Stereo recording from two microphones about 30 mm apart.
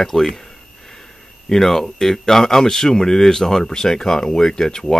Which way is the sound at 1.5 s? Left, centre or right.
Centre.